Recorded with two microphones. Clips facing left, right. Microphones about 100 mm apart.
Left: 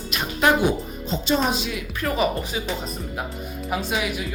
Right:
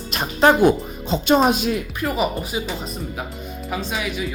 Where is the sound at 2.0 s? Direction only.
15° right (ahead or behind).